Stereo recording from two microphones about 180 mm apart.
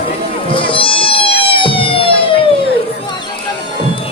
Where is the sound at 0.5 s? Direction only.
30° left (ahead or behind).